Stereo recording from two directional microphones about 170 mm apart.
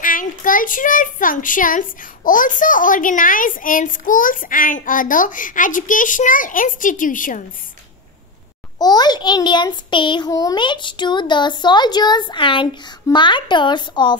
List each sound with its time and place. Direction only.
0.0 s a child's voice: 50° left (ahead or behind)
8.7 s a child's voice: 25° left (ahead or behind)